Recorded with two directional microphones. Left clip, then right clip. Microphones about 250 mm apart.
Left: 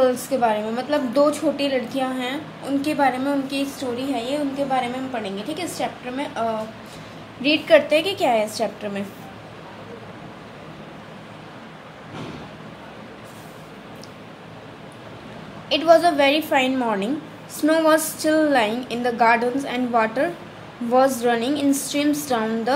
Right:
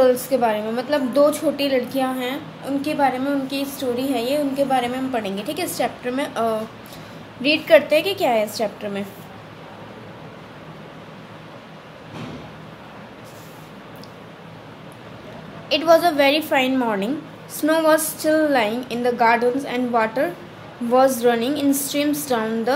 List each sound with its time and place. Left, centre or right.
0.0 s a woman's voice: centre
3.9 s a woman's voice: centre
7.4 s a woman's voice: centre
15.7 s a woman's voice: centre